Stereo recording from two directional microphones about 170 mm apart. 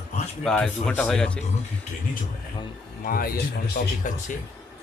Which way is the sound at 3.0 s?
55° left (ahead or behind).